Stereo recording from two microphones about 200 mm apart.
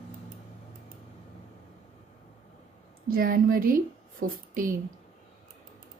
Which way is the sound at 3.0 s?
45° right (ahead or behind).